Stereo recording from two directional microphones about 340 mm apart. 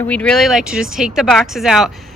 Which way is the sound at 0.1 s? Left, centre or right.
Centre.